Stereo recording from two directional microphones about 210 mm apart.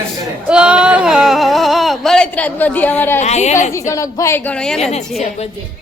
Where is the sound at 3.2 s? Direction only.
30° left (ahead or behind).